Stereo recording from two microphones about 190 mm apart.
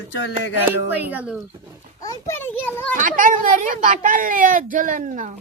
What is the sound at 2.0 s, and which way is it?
Speech, 10° left (ahead or behind).